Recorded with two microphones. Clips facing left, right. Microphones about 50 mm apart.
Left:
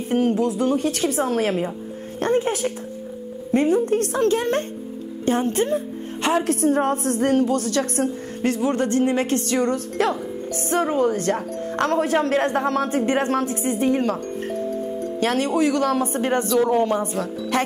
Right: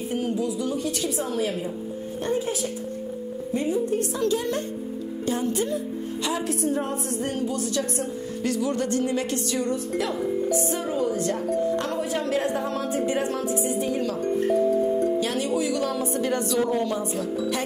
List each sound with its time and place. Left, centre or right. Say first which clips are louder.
0.1 s a woman's voice: left 7 dB; left
14.2 s music: right 5 dB; centre
15.1 s speech: left 4 dB; left